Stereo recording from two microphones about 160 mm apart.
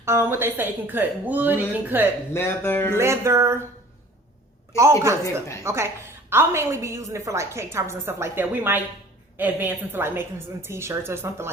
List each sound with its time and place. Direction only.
0.0 s a woman's voice: 15° right (ahead or behind)
2.3 s speech: 15° left (ahead or behind)
3.0 s a woman's voice: 15° right (ahead or behind)
4.8 s a woman's voice: 15° right (ahead or behind)
5.2 s a woman's voice: 20° left (ahead or behind)
5.6 s a woman's voice: 15° right (ahead or behind)